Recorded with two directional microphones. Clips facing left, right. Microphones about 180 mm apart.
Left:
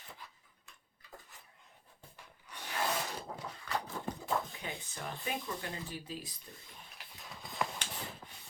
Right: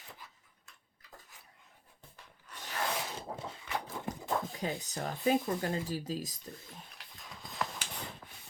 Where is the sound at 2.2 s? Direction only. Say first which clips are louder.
Even; 10° left (ahead or behind).